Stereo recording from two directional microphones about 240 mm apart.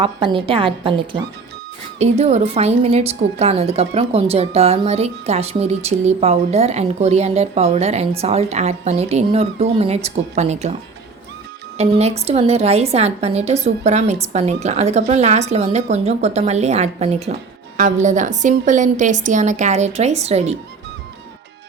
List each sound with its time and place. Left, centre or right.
0.0 s a woman's voice: right
11.8 s a woman's voice: right